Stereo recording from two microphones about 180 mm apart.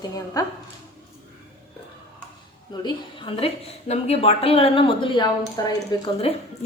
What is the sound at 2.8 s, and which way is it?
A woman's voice, 30° left (ahead or behind).